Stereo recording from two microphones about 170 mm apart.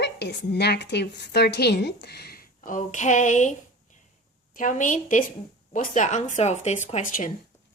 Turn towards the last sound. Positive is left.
turn(degrees=50)  # may be behind; listen again after turning